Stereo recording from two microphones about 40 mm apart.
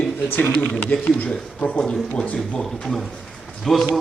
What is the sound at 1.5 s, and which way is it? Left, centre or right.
Speech, left.